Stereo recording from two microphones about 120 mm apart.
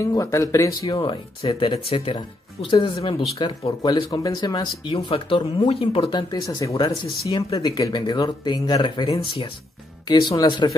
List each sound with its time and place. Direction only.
0.0 s speech: 25° left (ahead or behind)
0.9 s speech: 45° left (ahead or behind)
4.9 s speech: 50° left (ahead or behind)